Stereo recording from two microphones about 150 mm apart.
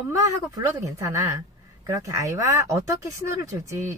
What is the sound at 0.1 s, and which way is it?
Speech, 20° right (ahead or behind).